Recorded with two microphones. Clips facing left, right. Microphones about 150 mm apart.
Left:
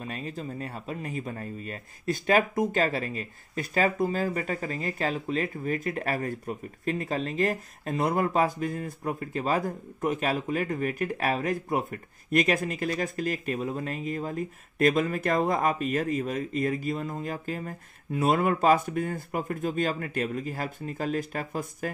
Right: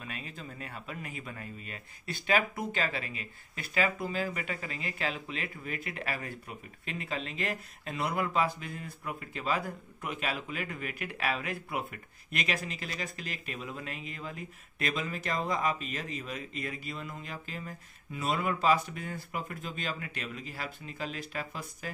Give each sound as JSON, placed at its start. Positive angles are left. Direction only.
{"t": 0.0, "sound": "speech", "side_deg": 35}